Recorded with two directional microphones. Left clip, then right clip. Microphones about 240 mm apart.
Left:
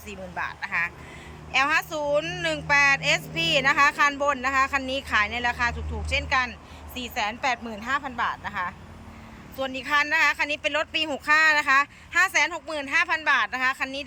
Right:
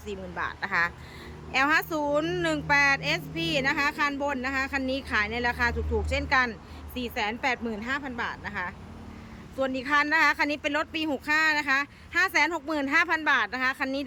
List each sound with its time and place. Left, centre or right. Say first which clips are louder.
0.1 s speech: left 1 dB; centre